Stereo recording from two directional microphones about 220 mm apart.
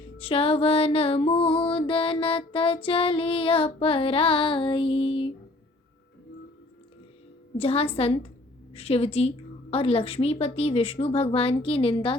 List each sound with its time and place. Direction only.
0.2 s music: 25° left (ahead or behind)
7.5 s music: 25° left (ahead or behind)